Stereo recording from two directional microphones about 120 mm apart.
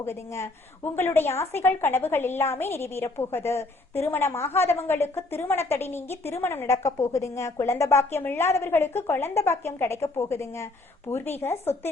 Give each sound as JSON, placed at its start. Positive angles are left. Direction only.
{"t": 0.0, "sound": "a woman's voice", "side_deg": 20}